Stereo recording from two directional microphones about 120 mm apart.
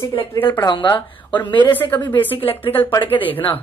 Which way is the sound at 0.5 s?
40° left (ahead or behind).